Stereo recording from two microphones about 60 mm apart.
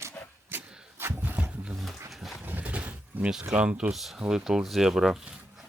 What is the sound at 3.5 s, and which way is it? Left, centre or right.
Speech, centre.